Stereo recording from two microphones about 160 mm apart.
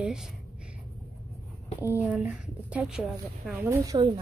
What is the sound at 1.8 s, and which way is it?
Speech, 10° right (ahead or behind).